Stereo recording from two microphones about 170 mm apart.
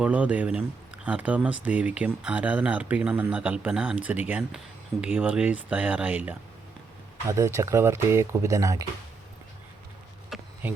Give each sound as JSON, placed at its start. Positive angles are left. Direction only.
{"t": 0.0, "sound": "speech", "side_deg": -5}
{"t": 10.3, "sound": "insect", "side_deg": 0}